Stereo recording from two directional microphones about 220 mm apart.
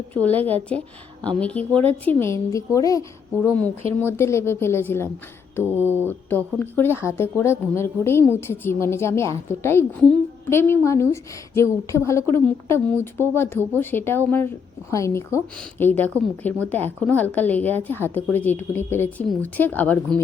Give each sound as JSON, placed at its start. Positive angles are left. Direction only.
{"t": 0.1, "sound": "a woman's voice", "side_deg": 5}
{"t": 4.0, "sound": "a woman's voice", "side_deg": 10}
{"t": 5.6, "sound": "speech", "side_deg": -10}
{"t": 6.1, "sound": "a woman's voice", "side_deg": 10}